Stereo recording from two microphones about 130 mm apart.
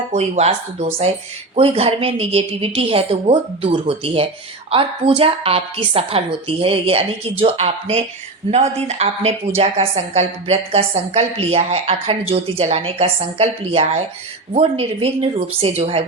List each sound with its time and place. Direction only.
0.1 s a woman's voice: 55° right (ahead or behind)